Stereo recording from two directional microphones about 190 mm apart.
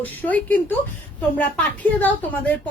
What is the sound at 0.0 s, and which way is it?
Speech, 10° left (ahead or behind).